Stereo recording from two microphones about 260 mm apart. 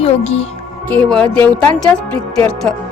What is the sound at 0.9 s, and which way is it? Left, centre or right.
Speech, centre.